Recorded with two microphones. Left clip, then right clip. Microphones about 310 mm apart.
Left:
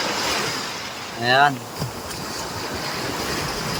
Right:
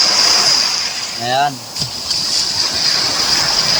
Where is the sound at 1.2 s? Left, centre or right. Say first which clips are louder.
Even; centre.